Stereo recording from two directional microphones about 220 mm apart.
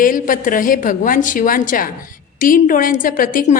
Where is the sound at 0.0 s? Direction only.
40° left (ahead or behind).